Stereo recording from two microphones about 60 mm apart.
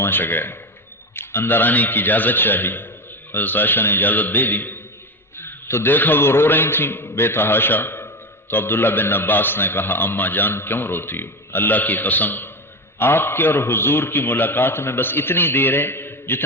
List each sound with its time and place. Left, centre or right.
0.0 s a man's voice: left
5.4 s a man's voice: left